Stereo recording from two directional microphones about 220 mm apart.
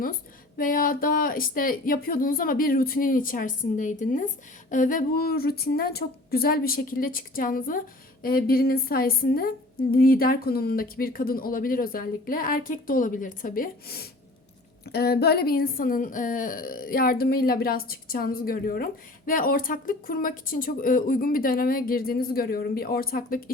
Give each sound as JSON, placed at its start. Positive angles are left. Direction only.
{"t": 0.0, "sound": "a woman's voice", "side_deg": 40}